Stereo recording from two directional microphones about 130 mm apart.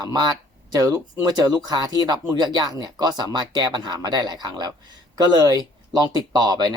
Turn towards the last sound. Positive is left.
turn(degrees=-30)  # may be behind; listen again after turning